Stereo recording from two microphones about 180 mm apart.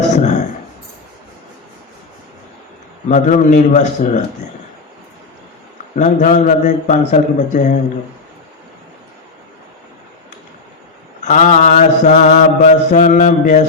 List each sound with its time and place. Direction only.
0.1 s a sound: 40° left (ahead or behind)
3.1 s a man's voice: 40° left (ahead or behind)
6.0 s a man's voice: 45° left (ahead or behind)
11.2 s mantra: 45° left (ahead or behind)